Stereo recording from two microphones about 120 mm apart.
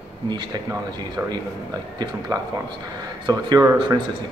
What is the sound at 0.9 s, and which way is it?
A man's voice, 35° right (ahead or behind).